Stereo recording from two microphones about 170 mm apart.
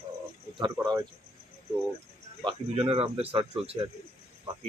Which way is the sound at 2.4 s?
35° right (ahead or behind).